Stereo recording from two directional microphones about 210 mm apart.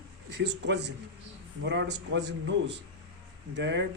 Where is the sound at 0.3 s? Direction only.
55° right (ahead or behind).